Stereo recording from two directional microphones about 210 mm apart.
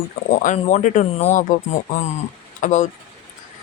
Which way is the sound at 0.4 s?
35° left (ahead or behind).